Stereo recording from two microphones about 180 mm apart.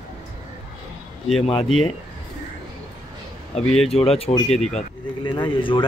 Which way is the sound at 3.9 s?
35° left (ahead or behind).